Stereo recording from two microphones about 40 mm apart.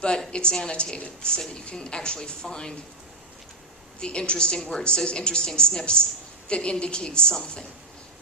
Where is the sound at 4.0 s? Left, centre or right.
Left.